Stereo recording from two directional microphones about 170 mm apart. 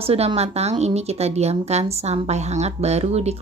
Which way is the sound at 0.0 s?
35° right (ahead or behind).